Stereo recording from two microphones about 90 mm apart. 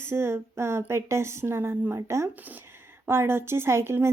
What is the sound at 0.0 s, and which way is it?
Speech, 30° right (ahead or behind).